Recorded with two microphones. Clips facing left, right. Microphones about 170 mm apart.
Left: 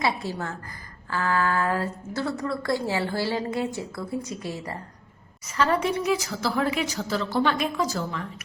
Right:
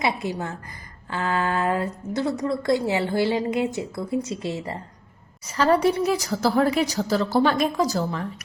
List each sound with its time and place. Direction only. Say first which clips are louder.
0.0 s a woman's voice: right 2 dB; 20° right (ahead or behind)
5.5 s a woman's voice: right 4 dB; 35° right (ahead or behind)